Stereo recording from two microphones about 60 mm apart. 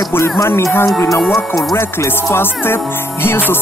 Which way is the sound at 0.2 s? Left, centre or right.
Left.